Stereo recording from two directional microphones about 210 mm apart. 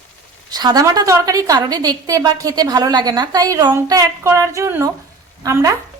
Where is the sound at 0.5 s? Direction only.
20° right (ahead or behind).